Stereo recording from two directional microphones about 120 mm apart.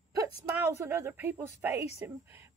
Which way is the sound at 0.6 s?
20° right (ahead or behind).